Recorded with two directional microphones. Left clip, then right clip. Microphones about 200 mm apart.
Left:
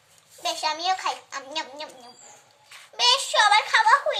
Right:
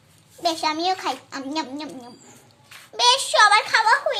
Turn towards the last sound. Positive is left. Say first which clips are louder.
# right 1 dB
turn(degrees=-25)  # may be behind; listen again after turning